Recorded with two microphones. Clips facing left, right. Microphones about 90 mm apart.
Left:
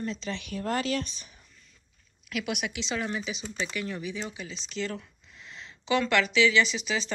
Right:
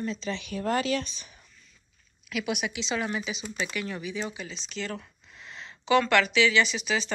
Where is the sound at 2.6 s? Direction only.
55° left (ahead or behind).